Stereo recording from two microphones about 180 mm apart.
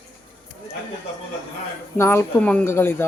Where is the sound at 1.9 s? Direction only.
15° left (ahead or behind).